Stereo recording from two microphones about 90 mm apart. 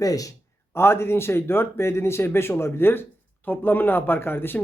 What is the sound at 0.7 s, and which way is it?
Speech, 25° left (ahead or behind).